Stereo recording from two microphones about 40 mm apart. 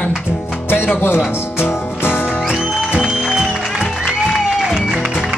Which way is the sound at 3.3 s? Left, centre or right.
Right.